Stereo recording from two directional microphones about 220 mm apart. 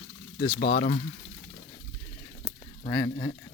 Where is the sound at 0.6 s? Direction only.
35° left (ahead or behind).